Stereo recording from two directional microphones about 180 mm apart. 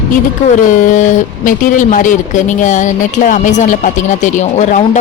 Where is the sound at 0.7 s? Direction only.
45° left (ahead or behind).